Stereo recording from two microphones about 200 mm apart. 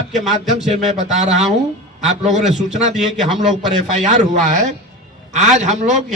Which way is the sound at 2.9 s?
Centre (ahead or behind).